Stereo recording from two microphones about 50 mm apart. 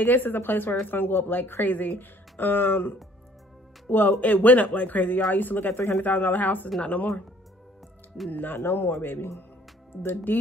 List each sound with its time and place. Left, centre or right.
0.0 s speech: left
4.2 s speech: left
6.8 s speech: left
8.3 s speech: left